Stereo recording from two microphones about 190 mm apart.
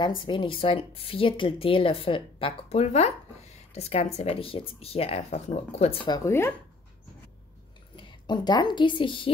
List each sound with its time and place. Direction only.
0.2 s speech: 25° left (ahead or behind)
7.9 s a woman's voice: 25° left (ahead or behind)